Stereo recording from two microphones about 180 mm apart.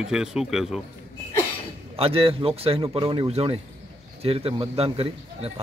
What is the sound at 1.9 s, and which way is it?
A man's voice, 30° right (ahead or behind).